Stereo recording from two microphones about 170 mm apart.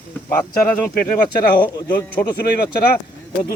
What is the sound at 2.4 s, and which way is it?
Speech, 65° left (ahead or behind).